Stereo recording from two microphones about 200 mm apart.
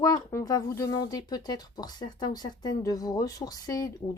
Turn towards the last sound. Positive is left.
turn(degrees=20)  # may be behind; listen again after turning